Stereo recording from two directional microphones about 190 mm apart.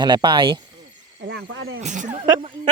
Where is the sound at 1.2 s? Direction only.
65° right (ahead or behind); by 1.8 s 85° right.